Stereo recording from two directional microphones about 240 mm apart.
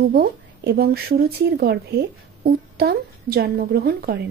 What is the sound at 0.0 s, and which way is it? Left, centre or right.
A child's voice, right.